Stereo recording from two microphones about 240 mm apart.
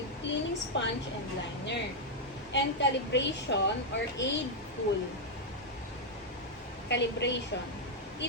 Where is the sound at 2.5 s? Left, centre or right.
Left.